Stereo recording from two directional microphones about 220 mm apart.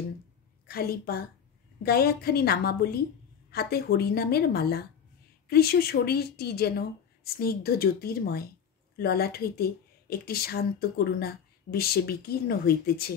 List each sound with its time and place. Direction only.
0.7 s speech: 45° left (ahead or behind)